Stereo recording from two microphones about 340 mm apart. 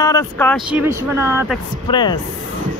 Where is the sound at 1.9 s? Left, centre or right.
Centre.